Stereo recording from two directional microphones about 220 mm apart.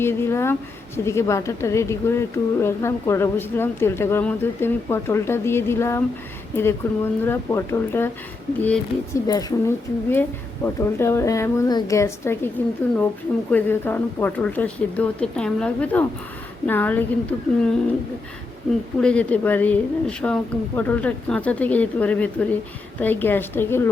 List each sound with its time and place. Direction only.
0.0 s a woman's voice: 10° left (ahead or behind)
18.9 s a woman's voice: 5° left (ahead or behind)